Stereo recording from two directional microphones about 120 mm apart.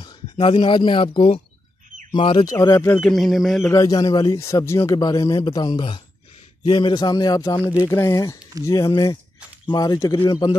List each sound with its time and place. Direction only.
0.0 s speech: 45° left (ahead or behind)
2.4 s speech: 25° left (ahead or behind)
3.0 s a sound: centre (ahead or behind)
3.7 s a man's voice: 30° left (ahead or behind)